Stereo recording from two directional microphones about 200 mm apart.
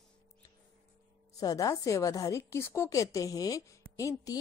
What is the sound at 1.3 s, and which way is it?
Speech, 20° left (ahead or behind).